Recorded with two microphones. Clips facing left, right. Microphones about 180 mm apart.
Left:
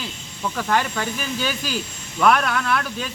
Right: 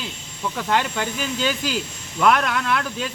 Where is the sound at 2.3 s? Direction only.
20° right (ahead or behind).